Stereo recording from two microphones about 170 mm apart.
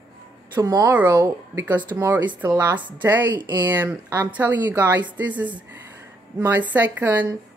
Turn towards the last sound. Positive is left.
turn(degrees=-10)  # may be behind; listen again after turning